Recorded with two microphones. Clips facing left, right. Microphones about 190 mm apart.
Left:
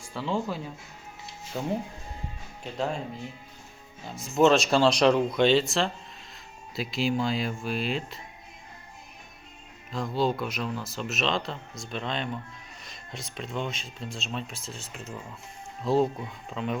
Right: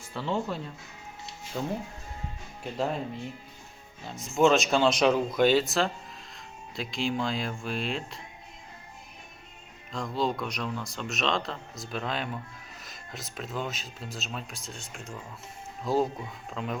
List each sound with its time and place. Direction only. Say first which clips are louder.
0.1 s speech: left 1 dB; centre (ahead or behind)
1.5 s speech: even; 20° left (ahead or behind)
2.7 s speech: even; centre (ahead or behind)
4.4 s speech: left 2 dB; centre (ahead or behind)
9.9 s speech: left 2 dB; centre (ahead or behind)